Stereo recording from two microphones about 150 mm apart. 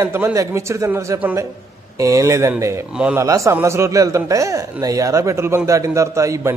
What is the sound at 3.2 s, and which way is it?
Speech, 20° right (ahead or behind).